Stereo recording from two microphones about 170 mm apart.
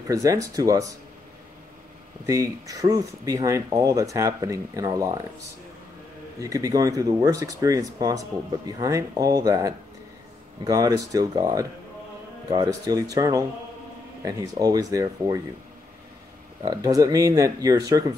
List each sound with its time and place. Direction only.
0.1 s speech: 20° right (ahead or behind)
2.2 s speech: 20° right (ahead or behind)
6.4 s speech: 20° right (ahead or behind)
16.6 s speech: 20° right (ahead or behind)